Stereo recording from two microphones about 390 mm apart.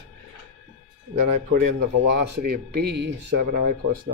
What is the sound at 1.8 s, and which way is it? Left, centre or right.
Speech, right.